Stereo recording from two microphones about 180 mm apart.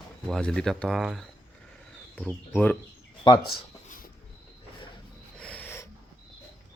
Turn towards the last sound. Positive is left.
turn(degrees=15)  # may be behind; listen again after turning